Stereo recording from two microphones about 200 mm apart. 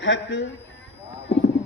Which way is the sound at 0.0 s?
65° left (ahead or behind).